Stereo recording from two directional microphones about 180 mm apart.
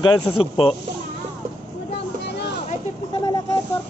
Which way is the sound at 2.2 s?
70° left (ahead or behind).